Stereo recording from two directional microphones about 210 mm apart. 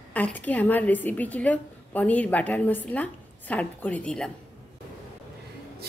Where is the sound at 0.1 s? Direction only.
5° left (ahead or behind).